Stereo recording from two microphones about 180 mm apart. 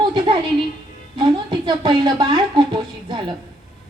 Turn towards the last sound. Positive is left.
turn(degrees=-25)  # may be behind; listen again after turning